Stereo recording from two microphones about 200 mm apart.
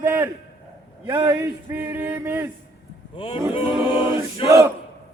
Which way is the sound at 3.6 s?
10° right (ahead or behind).